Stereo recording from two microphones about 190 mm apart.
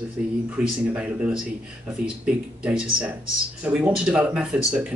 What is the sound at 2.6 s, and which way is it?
Speech, 5° right (ahead or behind).